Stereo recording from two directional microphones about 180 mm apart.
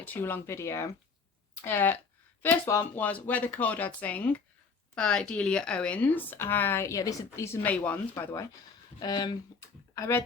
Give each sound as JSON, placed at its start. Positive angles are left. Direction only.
{"t": 0.0, "sound": "speech", "side_deg": 10}